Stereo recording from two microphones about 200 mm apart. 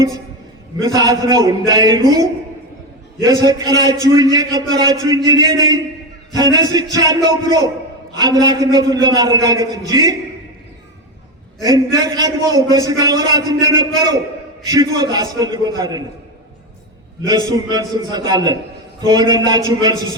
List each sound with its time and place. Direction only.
0.8 s a man's voice: 20° right (ahead or behind)
3.2 s a man's voice: 20° right (ahead or behind)
11.6 s a man's voice: 20° right (ahead or behind)
17.2 s a man's voice: 20° right (ahead or behind)